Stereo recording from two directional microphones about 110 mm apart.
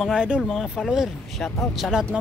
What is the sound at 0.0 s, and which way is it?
Speech, 5° right (ahead or behind).